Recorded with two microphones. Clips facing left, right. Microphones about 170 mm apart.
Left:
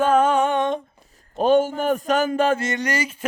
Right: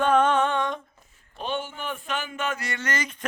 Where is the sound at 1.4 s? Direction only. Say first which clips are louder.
Left 14 dB; 40° left (ahead or behind); by 3.2 s 10° left (ahead or behind).